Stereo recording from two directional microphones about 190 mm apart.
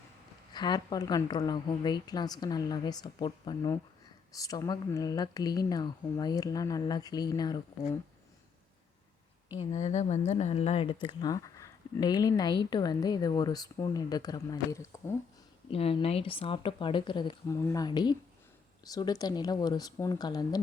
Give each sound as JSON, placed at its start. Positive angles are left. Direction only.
{"t": 0.5, "sound": "a woman's voice", "side_deg": 20}
{"t": 9.6, "sound": "a woman's voice", "side_deg": 35}
{"t": 15.7, "sound": "a woman's voice", "side_deg": 30}